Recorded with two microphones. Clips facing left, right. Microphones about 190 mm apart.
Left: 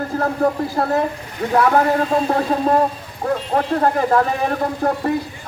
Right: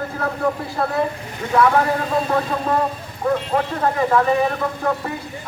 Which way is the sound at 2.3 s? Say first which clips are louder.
Left 3 dB; 40° left (ahead or behind).